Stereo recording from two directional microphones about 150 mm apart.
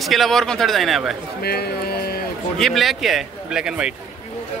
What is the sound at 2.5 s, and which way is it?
Speech, centre (ahead or behind).